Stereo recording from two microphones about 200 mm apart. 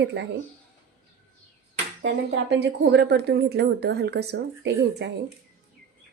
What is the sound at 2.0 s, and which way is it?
A woman's voice, 60° right (ahead or behind).